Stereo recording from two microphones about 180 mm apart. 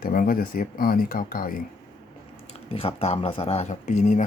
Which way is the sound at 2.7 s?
35° left (ahead or behind).